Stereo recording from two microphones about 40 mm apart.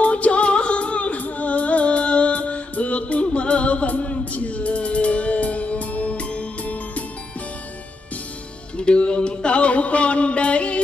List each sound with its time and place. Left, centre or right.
0.0 s music: left
8.7 s music: left